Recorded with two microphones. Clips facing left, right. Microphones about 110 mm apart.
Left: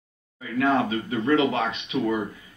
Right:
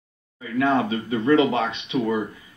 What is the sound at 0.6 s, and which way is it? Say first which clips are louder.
Speech: right 1 dB; 30° right (ahead or behind).